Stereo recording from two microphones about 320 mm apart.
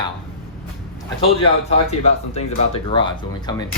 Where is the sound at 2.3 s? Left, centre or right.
Centre.